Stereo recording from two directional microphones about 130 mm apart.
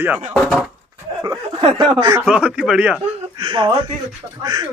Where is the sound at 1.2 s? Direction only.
35° right (ahead or behind).